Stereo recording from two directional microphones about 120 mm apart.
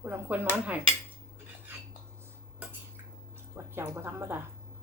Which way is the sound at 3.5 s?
20° right (ahead or behind).